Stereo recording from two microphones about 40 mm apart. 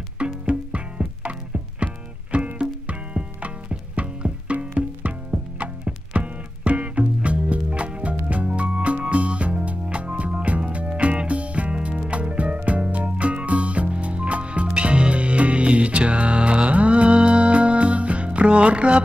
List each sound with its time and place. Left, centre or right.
0.2 s music: right
2.3 s music: right